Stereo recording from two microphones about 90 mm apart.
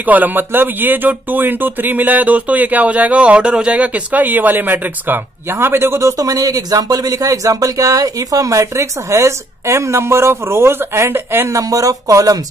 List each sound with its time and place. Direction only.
0.0 s speech: 20° right (ahead or behind); by 12.4 s 40° right (ahead or behind)